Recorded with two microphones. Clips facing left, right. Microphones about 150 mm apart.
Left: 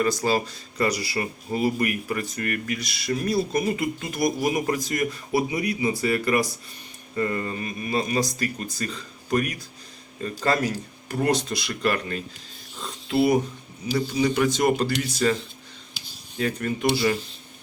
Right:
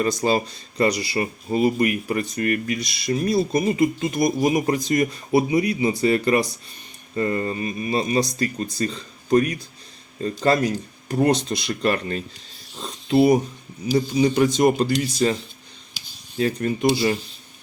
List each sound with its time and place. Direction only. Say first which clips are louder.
0.0 s speech: right 2 dB; 20° right (ahead or behind)
16.4 s speech: right 4 dB; 25° right (ahead or behind)